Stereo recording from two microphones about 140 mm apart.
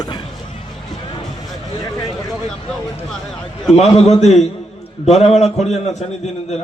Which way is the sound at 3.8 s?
50° left (ahead or behind).